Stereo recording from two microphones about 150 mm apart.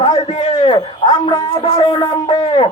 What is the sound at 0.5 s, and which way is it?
A man's voice, 30° left (ahead or behind).